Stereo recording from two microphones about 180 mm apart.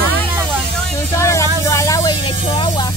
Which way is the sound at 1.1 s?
15° left (ahead or behind).